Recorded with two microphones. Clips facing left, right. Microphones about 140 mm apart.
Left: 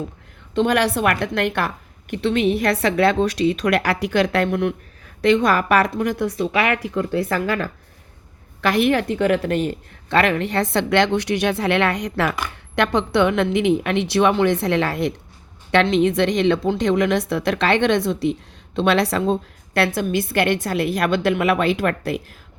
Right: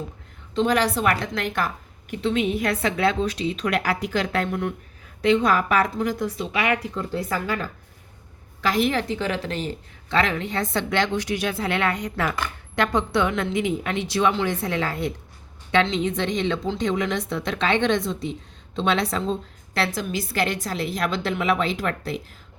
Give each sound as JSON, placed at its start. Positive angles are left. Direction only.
{"t": 0.5, "sound": "a woman's voice", "side_deg": 65}
{"t": 8.6, "sound": "a woman's voice", "side_deg": 65}